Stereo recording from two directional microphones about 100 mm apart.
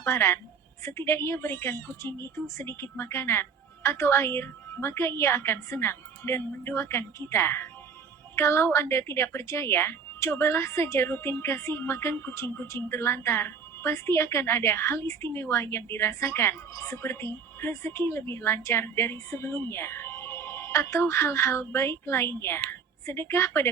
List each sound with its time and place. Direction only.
0.0 s speech: 25° left (ahead or behind)